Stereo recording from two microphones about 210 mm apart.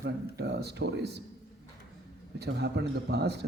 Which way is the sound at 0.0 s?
50° right (ahead or behind).